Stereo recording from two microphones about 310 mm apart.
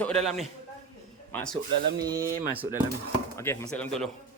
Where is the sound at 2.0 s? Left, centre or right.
Centre.